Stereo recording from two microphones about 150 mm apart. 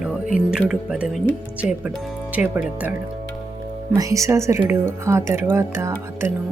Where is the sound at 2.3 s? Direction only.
10° right (ahead or behind).